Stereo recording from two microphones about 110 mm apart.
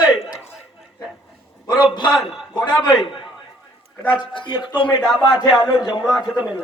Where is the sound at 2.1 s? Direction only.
Centre (ahead or behind).